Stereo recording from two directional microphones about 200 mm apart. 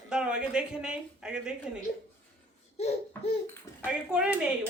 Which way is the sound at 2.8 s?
30° left (ahead or behind).